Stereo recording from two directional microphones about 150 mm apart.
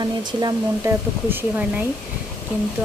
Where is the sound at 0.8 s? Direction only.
15° right (ahead or behind).